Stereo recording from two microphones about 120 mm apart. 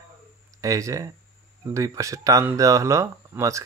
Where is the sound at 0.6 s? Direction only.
30° right (ahead or behind).